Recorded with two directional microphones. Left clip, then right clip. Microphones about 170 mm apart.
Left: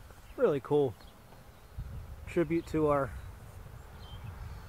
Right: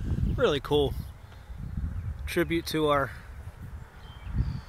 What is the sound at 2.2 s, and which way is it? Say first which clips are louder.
Speech: right 3 dB; 15° right (ahead or behind).